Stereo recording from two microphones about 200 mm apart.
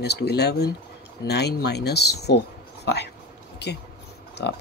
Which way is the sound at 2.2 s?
55° left (ahead or behind).